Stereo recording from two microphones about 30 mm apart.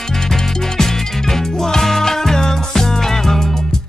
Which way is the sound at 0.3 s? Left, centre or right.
Centre.